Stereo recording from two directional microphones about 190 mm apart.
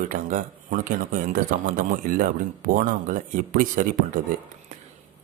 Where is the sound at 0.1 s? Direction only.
45° right (ahead or behind).